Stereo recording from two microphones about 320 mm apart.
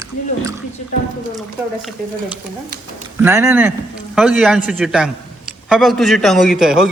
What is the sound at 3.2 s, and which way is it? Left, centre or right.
A man's voice, centre.